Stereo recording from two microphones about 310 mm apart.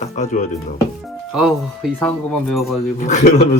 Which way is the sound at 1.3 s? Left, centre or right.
Centre.